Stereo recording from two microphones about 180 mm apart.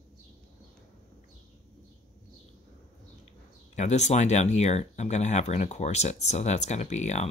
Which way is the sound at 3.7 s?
40° left (ahead or behind).